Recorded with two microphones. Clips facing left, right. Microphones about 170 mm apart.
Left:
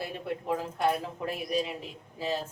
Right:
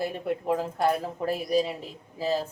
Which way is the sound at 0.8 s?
35° right (ahead or behind).